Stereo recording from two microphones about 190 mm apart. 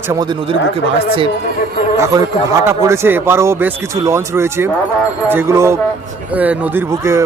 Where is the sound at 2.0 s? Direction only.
15° right (ahead or behind).